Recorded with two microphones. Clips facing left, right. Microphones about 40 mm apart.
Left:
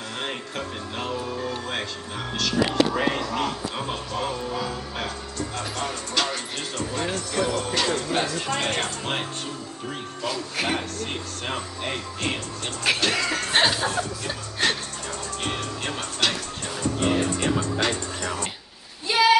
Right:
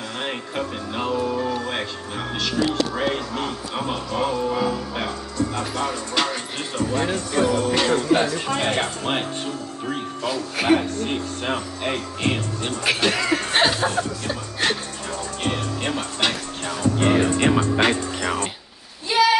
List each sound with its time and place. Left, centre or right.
0.2 s speech: centre
3.7 s speech: centre
6.2 s speech: centre
6.8 s speech: right; by 14.8 s centre
15.4 s music: centre
15.9 s speech: centre
16.6 s music: right
19.1 s a sound: centre